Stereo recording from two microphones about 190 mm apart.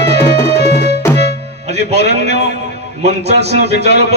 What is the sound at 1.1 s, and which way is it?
Music, 35° right (ahead or behind).